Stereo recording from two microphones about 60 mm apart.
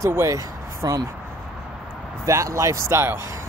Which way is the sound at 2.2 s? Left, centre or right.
Right.